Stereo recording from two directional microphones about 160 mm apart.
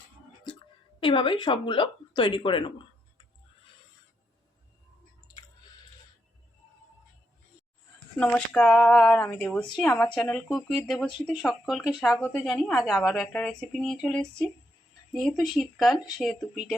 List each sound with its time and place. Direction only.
0.9 s speech: 30° left (ahead or behind)
8.2 s speech: 5° left (ahead or behind)